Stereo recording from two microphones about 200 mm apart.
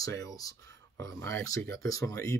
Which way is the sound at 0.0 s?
15° left (ahead or behind).